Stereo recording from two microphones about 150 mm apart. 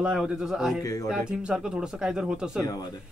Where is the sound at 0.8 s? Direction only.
20° left (ahead or behind).